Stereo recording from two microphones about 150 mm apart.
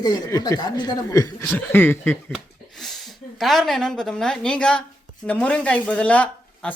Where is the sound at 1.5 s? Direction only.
10° left (ahead or behind).